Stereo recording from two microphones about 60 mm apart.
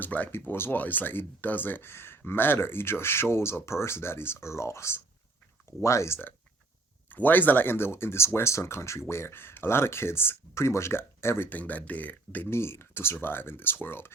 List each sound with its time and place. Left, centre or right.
0.0 s speech: left
0.3 s speech: left
7.1 s speech: left
11.4 s speech: left
12.5 s speech: left